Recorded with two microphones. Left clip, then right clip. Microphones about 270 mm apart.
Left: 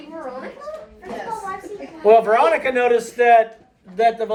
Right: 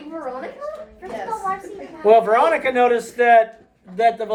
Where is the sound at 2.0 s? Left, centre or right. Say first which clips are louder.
Even; centre.